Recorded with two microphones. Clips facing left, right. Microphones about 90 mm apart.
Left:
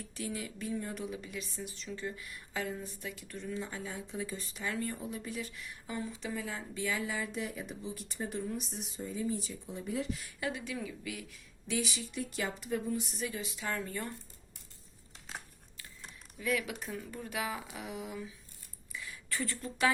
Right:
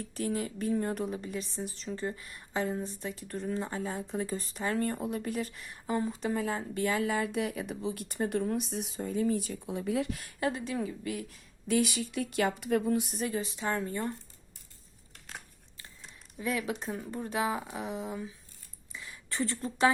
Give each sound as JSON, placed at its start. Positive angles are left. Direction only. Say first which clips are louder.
{"t": 0.0, "sound": "speech", "louder": "right 7 dB", "side_deg": -40}
{"t": 7.0, "sound": "speech", "louder": "right 7 dB", "side_deg": -60}
{"t": 13.1, "sound": "speech", "louder": "right 6 dB", "side_deg": -40}
{"t": 16.4, "sound": "speech", "louder": "right 2 dB", "side_deg": -30}
{"t": 18.9, "sound": "a sound", "louder": "right 4 dB", "side_deg": -25}